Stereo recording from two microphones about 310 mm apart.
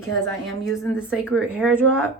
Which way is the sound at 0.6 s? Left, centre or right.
Centre.